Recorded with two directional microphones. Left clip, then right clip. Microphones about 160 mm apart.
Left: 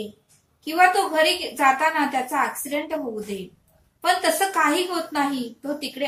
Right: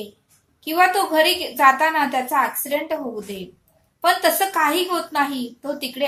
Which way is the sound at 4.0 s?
20° right (ahead or behind).